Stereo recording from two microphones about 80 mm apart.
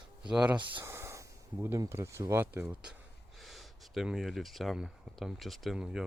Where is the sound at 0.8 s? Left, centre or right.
Right.